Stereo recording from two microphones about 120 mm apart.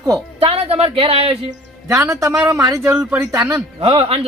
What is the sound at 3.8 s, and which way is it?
Speech, 50° right (ahead or behind).